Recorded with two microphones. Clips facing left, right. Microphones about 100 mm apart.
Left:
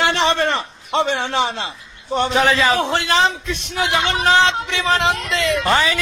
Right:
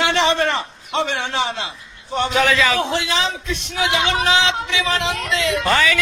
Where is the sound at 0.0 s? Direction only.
40° left (ahead or behind).